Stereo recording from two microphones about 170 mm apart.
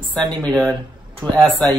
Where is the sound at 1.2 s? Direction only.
20° right (ahead or behind).